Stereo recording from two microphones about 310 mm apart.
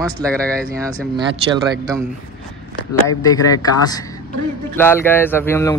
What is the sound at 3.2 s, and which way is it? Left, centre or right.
Speech, centre.